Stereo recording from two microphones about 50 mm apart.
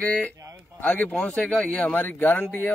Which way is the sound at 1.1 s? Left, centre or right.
Left.